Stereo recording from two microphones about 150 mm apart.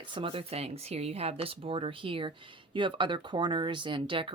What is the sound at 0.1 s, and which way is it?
Speech, 35° right (ahead or behind).